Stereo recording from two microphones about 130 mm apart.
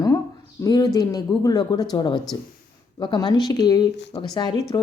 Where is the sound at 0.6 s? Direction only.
30° left (ahead or behind).